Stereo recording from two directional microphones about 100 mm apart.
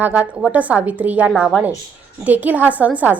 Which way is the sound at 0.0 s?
15° right (ahead or behind).